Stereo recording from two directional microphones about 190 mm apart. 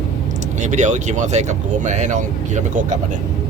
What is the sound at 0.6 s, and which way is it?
Speech, 40° right (ahead or behind).